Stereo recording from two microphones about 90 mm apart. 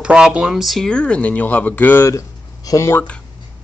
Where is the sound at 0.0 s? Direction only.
10° right (ahead or behind); by 2.0 s 20° left (ahead or behind).